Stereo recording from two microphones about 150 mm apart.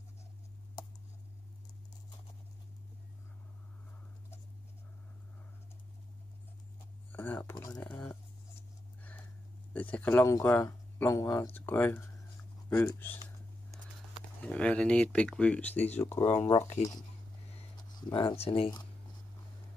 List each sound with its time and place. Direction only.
7.1 s speech: 10° left (ahead or behind)
7.5 s speech: 25° left (ahead or behind)
7.8 s speech: 10° left (ahead or behind)
9.8 s speech: 10° left (ahead or behind)
14.4 s speech: 10° left (ahead or behind)
18.1 s speech: 40° left (ahead or behind)